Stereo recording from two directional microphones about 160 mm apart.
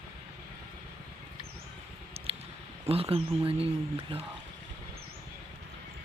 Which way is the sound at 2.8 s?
35° right (ahead or behind).